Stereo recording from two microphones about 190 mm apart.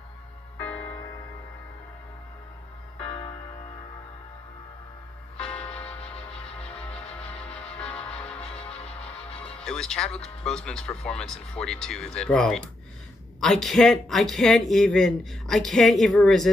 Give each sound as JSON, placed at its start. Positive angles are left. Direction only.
{"t": 0.6, "sound": "music", "side_deg": 5}
{"t": 3.0, "sound": "music", "side_deg": 30}
{"t": 5.4, "sound": "music", "side_deg": 5}
{"t": 5.9, "sound": "music", "side_deg": 30}
{"t": 8.4, "sound": "music", "side_deg": 30}
{"t": 9.4, "sound": "speech", "side_deg": 5}